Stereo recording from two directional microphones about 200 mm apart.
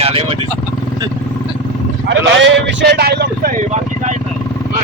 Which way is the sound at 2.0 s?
65° right (ahead or behind).